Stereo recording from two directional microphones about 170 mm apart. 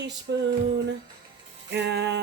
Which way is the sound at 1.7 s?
75° right (ahead or behind).